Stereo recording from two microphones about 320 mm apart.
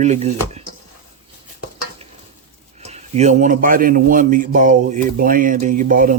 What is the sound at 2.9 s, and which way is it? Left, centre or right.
A man's voice, centre.